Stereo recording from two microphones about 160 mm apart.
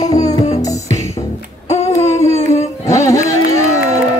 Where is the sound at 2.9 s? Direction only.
20° left (ahead or behind).